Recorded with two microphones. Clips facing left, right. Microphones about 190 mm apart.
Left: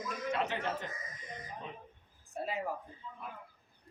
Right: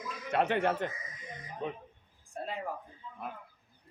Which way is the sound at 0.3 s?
60° right (ahead or behind).